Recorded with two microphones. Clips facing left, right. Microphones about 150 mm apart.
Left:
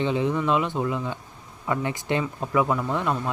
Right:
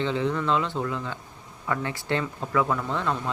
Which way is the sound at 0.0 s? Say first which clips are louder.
Left 2 dB; 15° left (ahead or behind).